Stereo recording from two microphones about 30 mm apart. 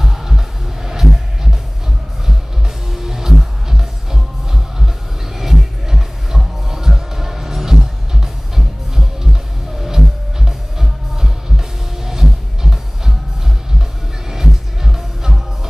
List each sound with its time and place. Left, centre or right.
0.0 s music: centre
2.9 s music: centre
14.3 s music: centre